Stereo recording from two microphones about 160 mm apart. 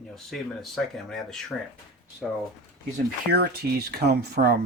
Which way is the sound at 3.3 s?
85° right.